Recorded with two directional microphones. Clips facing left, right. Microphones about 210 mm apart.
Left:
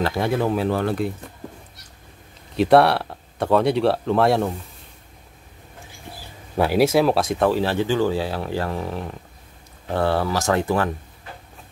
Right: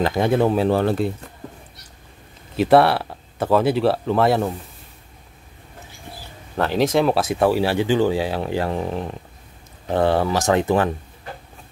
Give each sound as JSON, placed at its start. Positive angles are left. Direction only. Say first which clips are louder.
{"t": 0.0, "sound": "speech", "louder": "right 3 dB", "side_deg": -20}
{"t": 2.5, "sound": "speech", "louder": "even", "side_deg": 0}
{"t": 6.5, "sound": "speech", "louder": "left 1 dB", "side_deg": 10}